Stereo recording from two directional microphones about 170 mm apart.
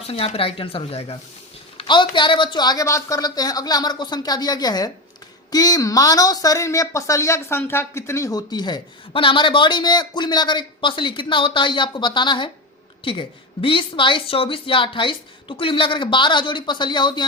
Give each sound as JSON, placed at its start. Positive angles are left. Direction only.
{"t": 0.1, "sound": "a woman's voice", "side_deg": 35}